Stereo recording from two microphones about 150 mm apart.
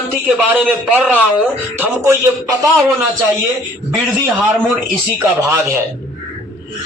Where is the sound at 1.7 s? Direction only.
20° right (ahead or behind).